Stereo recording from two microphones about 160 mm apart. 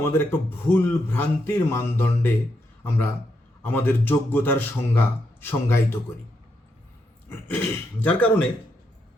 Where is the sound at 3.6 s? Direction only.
10° left (ahead or behind).